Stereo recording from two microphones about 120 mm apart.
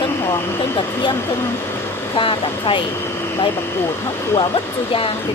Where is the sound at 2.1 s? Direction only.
45° left (ahead or behind).